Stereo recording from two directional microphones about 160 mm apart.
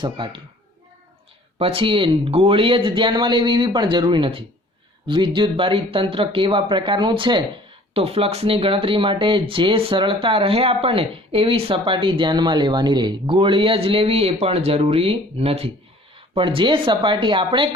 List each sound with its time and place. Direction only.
0.0 s speech: 30° right (ahead or behind)
1.5 s speech: 35° right (ahead or behind)